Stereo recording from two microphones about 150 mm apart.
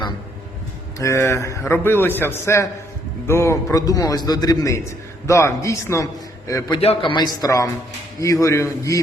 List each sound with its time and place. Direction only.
0.9 s a man's voice: 20° left (ahead or behind)
6.7 s a man's voice: 35° left (ahead or behind)
7.3 s a man's voice: 25° left (ahead or behind)